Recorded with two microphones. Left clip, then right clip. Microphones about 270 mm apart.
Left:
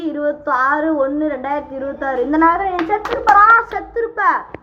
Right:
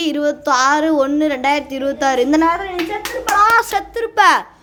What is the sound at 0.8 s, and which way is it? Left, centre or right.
A woman's voice, right.